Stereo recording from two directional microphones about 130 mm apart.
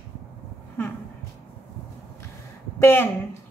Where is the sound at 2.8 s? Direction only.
15° left (ahead or behind).